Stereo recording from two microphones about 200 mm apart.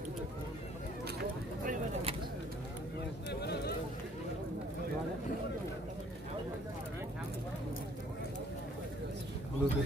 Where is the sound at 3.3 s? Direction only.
55° left (ahead or behind).